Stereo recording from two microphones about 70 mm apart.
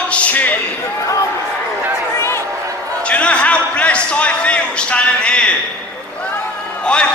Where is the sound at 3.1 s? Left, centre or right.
Centre.